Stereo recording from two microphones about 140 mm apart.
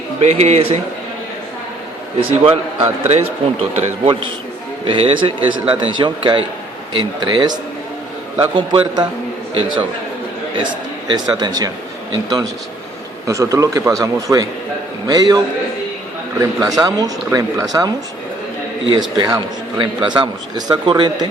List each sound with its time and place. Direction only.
0.2 s a man's voice: 50° right (ahead or behind)
2.4 s a man's voice: 40° right (ahead or behind)
4.9 s a man's voice: 40° right (ahead or behind)
11.1 s a man's voice: 30° right (ahead or behind)
13.2 s a man's voice: 25° right (ahead or behind)
16.4 s a man's voice: 25° right (ahead or behind)
19.1 s a man's voice: 30° right (ahead or behind)